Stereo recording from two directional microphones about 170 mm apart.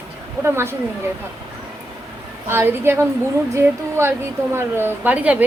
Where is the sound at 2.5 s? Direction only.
15° right (ahead or behind).